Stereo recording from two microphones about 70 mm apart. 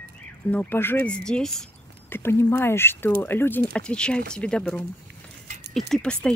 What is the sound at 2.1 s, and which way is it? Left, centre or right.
Speech, left.